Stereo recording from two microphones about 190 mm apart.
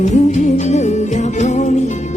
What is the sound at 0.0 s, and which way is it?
Music, 35° left (ahead or behind).